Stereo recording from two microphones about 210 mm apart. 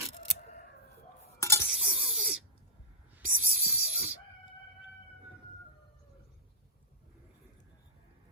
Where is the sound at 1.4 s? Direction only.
15° left (ahead or behind).